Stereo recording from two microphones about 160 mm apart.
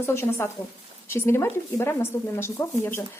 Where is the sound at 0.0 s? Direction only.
15° left (ahead or behind).